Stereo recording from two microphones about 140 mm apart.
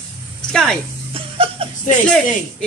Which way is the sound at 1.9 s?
5° left (ahead or behind).